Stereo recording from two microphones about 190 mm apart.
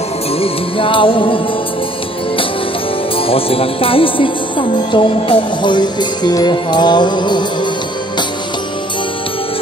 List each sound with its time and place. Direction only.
0.4 s music: 30° left (ahead or behind)
3.2 s music: 30° left (ahead or behind)